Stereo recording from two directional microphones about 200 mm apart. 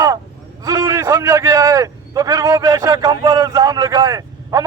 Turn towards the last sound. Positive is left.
turn(degrees=-15)  # may be behind; listen again after turning